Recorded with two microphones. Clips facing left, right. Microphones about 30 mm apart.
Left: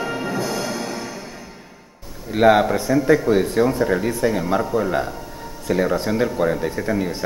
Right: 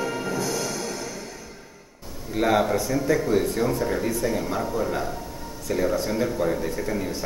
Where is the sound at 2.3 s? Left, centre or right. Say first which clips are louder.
Left 6 dB; left.